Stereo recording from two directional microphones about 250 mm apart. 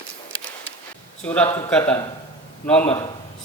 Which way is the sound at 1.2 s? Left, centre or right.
Centre.